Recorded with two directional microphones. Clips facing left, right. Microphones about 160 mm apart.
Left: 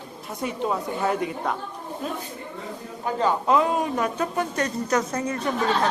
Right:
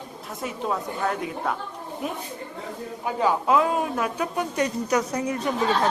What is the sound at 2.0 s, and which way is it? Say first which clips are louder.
A woman's voice: right 1 dB; 15° right (ahead or behind).